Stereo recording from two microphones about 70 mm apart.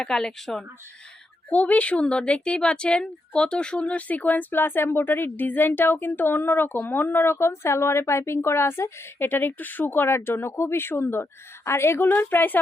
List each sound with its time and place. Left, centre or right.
0.0 s speech: centre
1.5 s speech: left